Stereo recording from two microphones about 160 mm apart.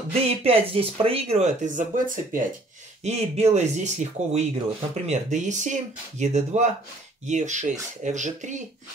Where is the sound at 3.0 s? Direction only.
40° right (ahead or behind).